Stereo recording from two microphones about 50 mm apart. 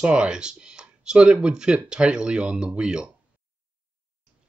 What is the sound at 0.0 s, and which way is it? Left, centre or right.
Speech, centre.